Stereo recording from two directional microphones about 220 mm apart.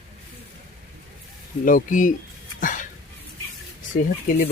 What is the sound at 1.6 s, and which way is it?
Speech, 40° left (ahead or behind).